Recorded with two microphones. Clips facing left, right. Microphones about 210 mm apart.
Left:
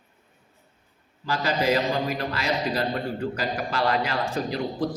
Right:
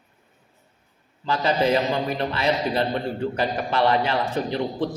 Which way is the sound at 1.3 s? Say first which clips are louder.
Right 3 dB; 25° right (ahead or behind).